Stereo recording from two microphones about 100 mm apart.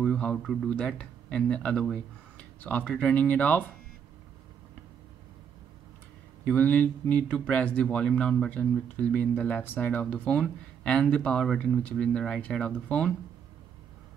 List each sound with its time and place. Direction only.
0.1 s speech: 10° left (ahead or behind)
6.4 s speech: 15° left (ahead or behind)